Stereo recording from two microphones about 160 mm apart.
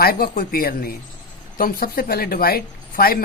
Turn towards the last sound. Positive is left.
turn(degrees=70)  # may be behind; listen again after turning